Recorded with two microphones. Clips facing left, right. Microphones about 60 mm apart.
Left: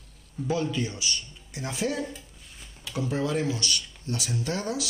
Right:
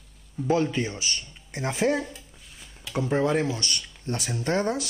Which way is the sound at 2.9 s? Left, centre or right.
Right.